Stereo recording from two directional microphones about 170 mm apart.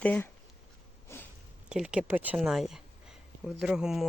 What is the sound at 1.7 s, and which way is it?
Speech, 5° right (ahead or behind).